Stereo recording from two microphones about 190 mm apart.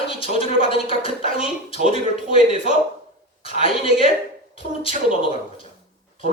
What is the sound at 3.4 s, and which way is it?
Speech, 30° left (ahead or behind).